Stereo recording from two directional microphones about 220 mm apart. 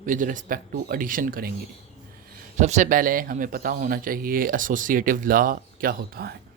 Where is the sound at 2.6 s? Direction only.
35° right (ahead or behind).